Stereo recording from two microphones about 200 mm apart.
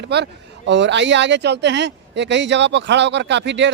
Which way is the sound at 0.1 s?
60° right (ahead or behind).